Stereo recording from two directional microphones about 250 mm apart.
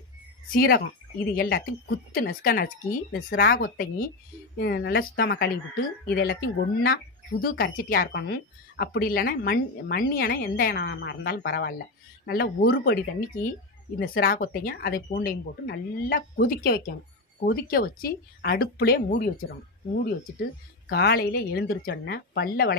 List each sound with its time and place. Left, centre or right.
0.5 s speech: left
20.9 s speech: left